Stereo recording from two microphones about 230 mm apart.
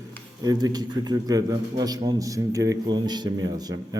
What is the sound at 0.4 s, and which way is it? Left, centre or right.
A man's voice, centre.